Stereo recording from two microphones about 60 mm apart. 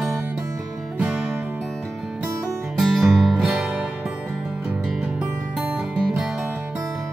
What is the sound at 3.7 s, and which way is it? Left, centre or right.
Music, centre.